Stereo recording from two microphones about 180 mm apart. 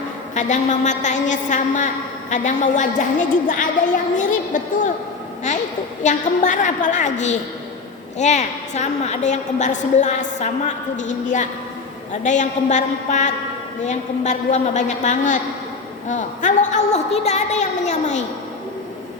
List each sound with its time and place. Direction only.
0.3 s a woman's voice: 45° left (ahead or behind)
6.0 s a woman's voice: 45° left (ahead or behind)